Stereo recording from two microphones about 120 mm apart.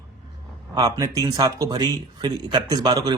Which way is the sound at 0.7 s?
30° right (ahead or behind).